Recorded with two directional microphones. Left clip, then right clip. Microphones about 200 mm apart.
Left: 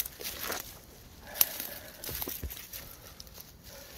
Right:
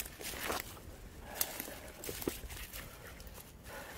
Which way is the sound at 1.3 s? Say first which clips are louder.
Left 7 dB; 10° left (ahead or behind).